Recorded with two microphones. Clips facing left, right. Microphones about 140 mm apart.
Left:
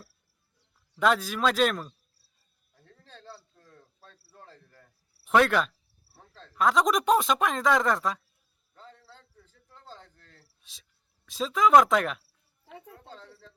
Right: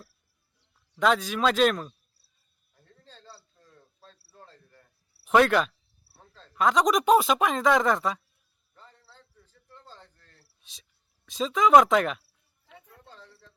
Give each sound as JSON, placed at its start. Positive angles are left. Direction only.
{"t": 0.9, "sound": "speech", "side_deg": 0}
{"t": 5.2, "sound": "speech", "side_deg": 0}
{"t": 10.6, "sound": "cricket", "side_deg": 0}
{"t": 11.3, "sound": "speech", "side_deg": 0}
{"t": 12.6, "sound": "a sound", "side_deg": 55}